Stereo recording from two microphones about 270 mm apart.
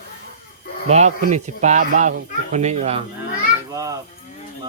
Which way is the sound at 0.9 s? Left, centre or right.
Right.